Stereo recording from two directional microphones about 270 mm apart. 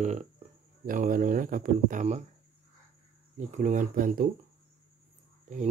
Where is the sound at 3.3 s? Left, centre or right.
Right.